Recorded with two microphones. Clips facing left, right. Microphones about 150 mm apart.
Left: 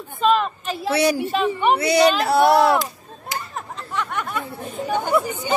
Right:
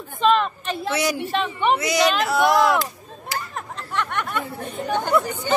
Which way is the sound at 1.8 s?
30° left (ahead or behind).